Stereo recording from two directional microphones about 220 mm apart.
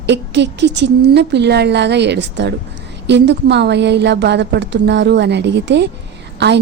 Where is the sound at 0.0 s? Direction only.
50° right (ahead or behind).